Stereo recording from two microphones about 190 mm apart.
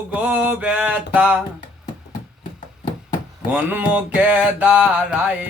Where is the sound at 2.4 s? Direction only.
45° left (ahead or behind).